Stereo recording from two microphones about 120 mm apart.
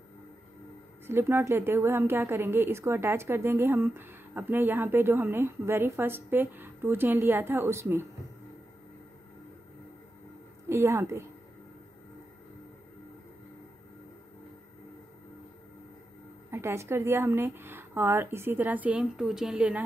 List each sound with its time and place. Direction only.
1.0 s a woman's voice: 20° right (ahead or behind)
10.7 s a woman's voice: 20° right (ahead or behind)
16.4 s a woman's voice: 20° right (ahead or behind)